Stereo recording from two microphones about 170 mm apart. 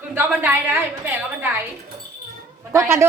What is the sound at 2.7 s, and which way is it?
Speech, 15° right (ahead or behind).